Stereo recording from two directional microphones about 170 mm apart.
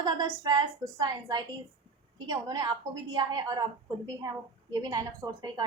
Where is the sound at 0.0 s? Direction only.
25° right (ahead or behind).